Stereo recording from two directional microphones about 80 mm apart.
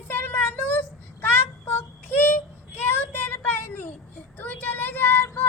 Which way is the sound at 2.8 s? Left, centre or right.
Left.